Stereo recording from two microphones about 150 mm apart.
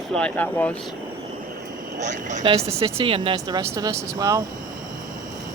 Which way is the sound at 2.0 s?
55° right (ahead or behind).